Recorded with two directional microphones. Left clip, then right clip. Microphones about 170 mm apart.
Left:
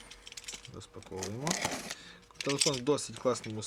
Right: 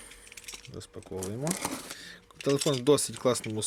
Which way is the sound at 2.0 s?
20° right (ahead or behind).